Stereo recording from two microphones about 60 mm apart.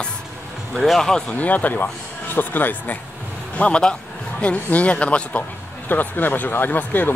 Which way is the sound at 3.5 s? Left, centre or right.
Centre.